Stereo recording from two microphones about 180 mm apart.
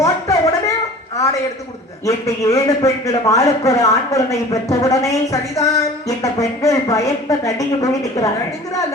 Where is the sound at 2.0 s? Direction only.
20° left (ahead or behind).